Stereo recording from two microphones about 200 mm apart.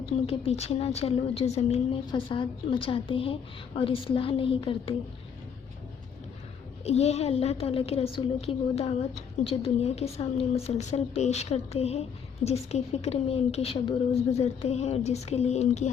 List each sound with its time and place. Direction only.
0.3 s a woman's voice: 30° left (ahead or behind)
6.8 s a woman's voice: 30° left (ahead or behind)